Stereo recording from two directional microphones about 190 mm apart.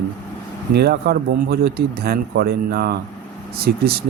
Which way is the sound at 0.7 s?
60° right (ahead or behind).